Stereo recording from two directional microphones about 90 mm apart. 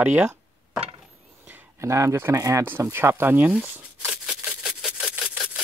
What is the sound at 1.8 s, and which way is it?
Speech, 35° right (ahead or behind).